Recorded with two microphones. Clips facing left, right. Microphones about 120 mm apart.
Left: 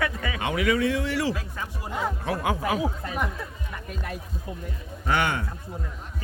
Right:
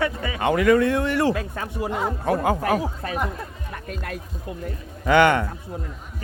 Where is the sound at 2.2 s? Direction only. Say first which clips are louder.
Right 7 dB; 45° right (ahead or behind).